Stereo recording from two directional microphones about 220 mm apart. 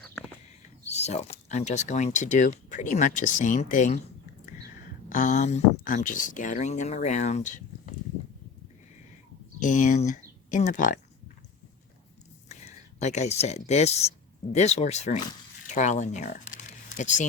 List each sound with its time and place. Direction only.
0.9 s speech: 30° left (ahead or behind)
5.0 s speech: 35° left (ahead or behind)
9.6 s speech: 35° left (ahead or behind)
12.5 s speech: 30° left (ahead or behind)